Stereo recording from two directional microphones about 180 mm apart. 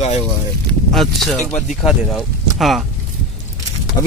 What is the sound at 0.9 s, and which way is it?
Speech, centre (ahead or behind).